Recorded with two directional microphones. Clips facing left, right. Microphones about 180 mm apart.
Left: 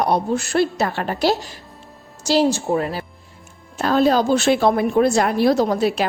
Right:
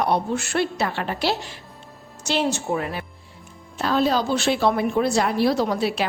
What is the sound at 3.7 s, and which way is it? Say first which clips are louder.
A woman's voice: left 4 dB; 45° left (ahead or behind).